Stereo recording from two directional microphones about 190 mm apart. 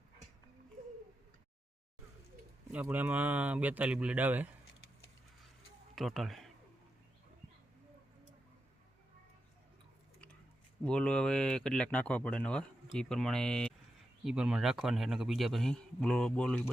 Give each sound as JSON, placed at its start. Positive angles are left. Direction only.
{"t": 2.7, "sound": "speech", "side_deg": -10}
{"t": 5.9, "sound": "speech", "side_deg": 0}
{"t": 10.8, "sound": "speech", "side_deg": 5}